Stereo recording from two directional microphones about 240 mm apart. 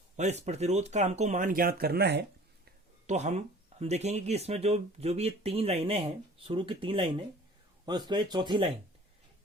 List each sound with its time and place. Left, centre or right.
0.2 s speech: right
3.1 s speech: right